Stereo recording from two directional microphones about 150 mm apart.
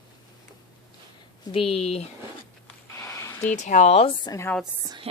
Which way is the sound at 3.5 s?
55° left (ahead or behind).